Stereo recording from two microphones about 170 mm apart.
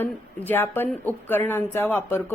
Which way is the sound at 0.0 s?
10° left (ahead or behind).